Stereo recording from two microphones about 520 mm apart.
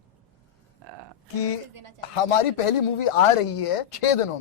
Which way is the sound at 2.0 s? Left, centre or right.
Left.